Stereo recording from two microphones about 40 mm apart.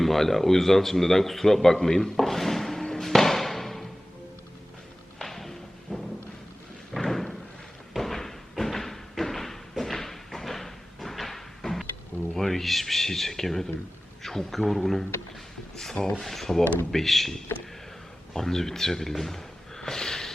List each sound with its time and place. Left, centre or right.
0.0 s a man's voice: centre
5.2 s music: centre
6.9 s thump: centre
12.3 s a sound: centre
14.2 s speech: centre
15.7 s a sound: centre
16.0 s speech: left
16.2 s speech: centre